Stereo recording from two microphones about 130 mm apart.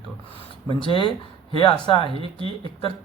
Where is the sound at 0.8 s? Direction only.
40° left (ahead or behind).